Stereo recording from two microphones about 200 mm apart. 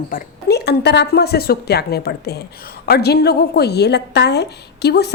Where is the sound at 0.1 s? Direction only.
50° left (ahead or behind).